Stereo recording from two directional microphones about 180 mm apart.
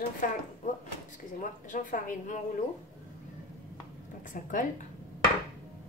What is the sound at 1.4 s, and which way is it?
A woman's voice, 45° left (ahead or behind).